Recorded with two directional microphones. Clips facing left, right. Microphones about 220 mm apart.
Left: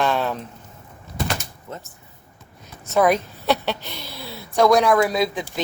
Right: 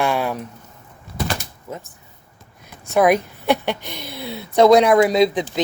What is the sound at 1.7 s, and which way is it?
Speech, 10° right (ahead or behind).